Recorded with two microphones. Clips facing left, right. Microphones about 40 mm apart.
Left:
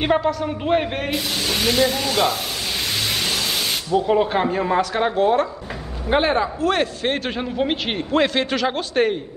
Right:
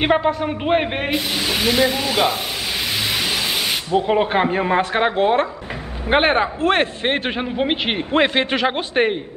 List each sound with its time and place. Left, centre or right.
0.0 s a man's voice: right
3.1 s vehicle: centre
3.9 s a man's voice: right